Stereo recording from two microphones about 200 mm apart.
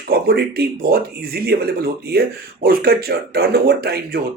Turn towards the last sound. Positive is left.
turn(degrees=-50)  # may be behind; listen again after turning